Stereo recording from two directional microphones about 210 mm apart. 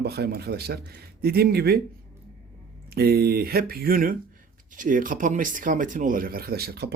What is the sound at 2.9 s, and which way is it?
Speech, 50° right (ahead or behind).